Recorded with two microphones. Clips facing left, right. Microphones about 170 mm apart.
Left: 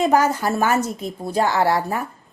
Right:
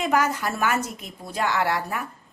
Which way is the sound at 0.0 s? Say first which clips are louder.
Left 5 dB; 30° left (ahead or behind).